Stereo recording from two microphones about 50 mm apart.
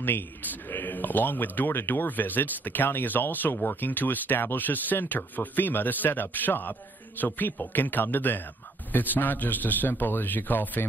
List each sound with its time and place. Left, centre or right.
0.0 s speech: left